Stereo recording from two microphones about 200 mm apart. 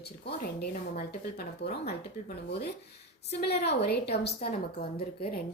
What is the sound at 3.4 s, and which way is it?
A woman's voice, 55° left (ahead or behind).